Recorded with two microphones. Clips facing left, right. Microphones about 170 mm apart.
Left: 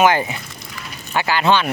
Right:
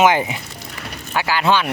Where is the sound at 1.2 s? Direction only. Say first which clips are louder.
Left 1 dB; 5° right (ahead or behind).